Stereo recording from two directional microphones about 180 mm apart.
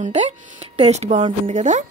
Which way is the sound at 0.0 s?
40° right (ahead or behind).